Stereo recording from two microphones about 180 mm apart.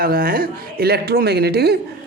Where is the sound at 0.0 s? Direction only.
55° right (ahead or behind).